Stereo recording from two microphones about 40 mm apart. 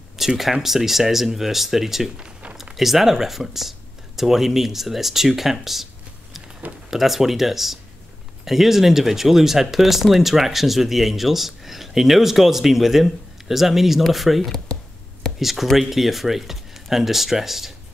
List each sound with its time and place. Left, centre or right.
0.4 s speech: centre
2.1 s a sound: right
2.5 s speech: centre
6.9 s speech: centre